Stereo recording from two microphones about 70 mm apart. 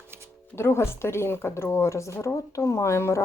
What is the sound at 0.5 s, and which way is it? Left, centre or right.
Speech, left.